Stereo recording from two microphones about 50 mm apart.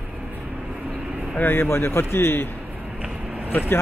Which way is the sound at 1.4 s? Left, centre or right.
Left.